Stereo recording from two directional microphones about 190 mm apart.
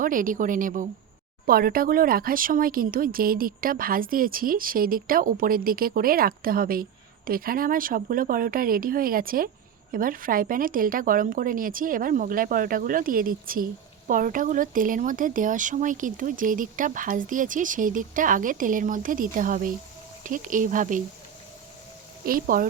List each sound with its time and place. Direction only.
0.0 s speech: 45° right (ahead or behind)
22.3 s speech: 50° right (ahead or behind)